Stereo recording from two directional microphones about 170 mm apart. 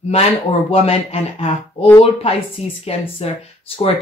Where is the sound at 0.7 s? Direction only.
35° left (ahead or behind).